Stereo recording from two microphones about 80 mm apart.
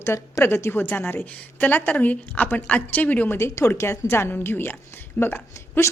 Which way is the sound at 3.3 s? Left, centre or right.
Left.